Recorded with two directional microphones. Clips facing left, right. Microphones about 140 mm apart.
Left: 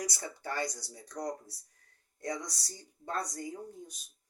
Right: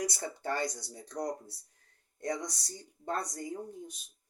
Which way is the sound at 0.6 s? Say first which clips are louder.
Right 1 dB; 25° right (ahead or behind).